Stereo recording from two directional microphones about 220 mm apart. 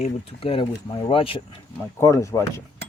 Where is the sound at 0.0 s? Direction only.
25° left (ahead or behind).